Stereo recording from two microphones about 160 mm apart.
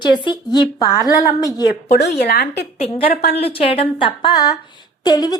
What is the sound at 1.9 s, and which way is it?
Speech, 80° left.